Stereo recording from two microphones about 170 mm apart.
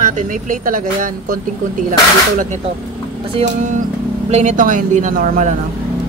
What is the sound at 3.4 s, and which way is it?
Speech, 45° right (ahead or behind).